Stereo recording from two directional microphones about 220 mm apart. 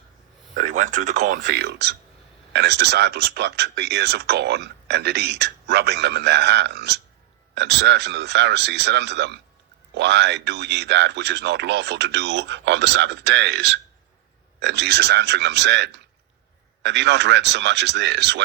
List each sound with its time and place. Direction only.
0.5 s a man's voice: 35° right (ahead or behind); by 18.4 s 50° right (ahead or behind)